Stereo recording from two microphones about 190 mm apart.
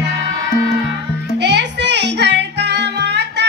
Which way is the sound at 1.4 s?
65° right (ahead or behind).